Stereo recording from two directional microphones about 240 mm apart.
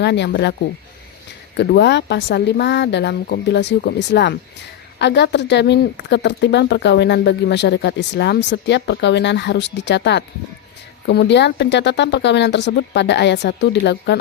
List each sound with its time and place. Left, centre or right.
0.0 s speech: left
1.5 s speech: left